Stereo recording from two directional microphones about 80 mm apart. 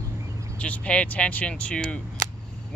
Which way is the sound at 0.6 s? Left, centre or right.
Centre.